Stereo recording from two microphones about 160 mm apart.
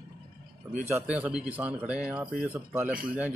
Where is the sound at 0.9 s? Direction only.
10° right (ahead or behind).